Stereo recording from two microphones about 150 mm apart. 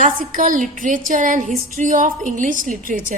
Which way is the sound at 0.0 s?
65° right (ahead or behind).